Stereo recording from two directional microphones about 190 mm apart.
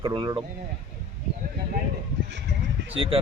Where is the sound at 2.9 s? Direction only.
30° right (ahead or behind).